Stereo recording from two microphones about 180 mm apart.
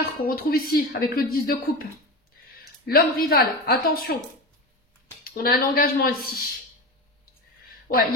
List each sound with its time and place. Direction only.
0.2 s speech: 55° left (ahead or behind)
5.2 s speech: 55° left (ahead or behind)